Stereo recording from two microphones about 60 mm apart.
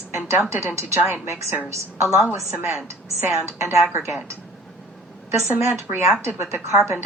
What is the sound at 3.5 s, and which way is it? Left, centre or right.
Speech, right.